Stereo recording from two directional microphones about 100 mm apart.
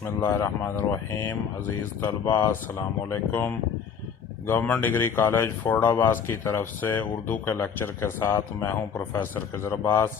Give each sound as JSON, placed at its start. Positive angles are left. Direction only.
{"t": 0.2, "sound": "speech", "side_deg": 25}